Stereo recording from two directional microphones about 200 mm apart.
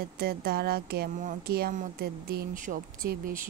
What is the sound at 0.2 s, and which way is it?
Speech, 50° right (ahead or behind).